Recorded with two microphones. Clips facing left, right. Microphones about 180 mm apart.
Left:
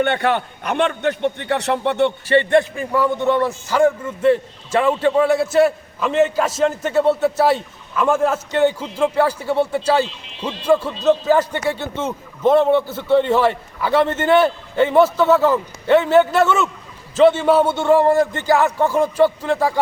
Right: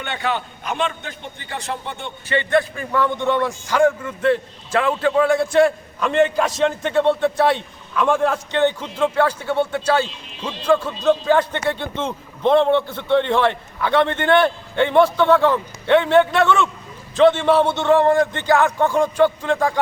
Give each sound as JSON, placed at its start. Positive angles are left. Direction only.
{"t": 0.0, "sound": "a man's voice", "side_deg": 60}
{"t": 2.2, "sound": "a man's voice", "side_deg": 30}
{"t": 2.9, "sound": "a man's voice", "side_deg": 10}